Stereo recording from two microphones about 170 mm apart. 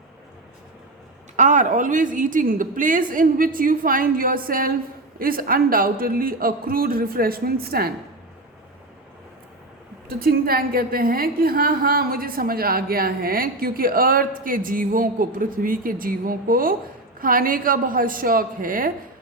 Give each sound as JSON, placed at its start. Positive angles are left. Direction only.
{"t": 1.4, "sound": "a woman's voice", "side_deg": -45}
{"t": 10.1, "sound": "a woman's voice", "side_deg": -60}